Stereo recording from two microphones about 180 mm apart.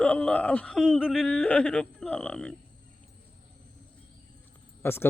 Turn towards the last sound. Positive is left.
turn(degrees=15)  # may be behind; listen again after turning